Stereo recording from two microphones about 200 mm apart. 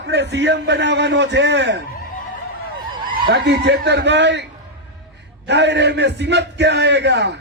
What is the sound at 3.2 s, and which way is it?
A man's voice, 60° right (ahead or behind).